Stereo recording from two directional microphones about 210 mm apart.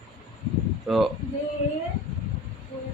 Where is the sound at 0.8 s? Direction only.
Centre (ahead or behind).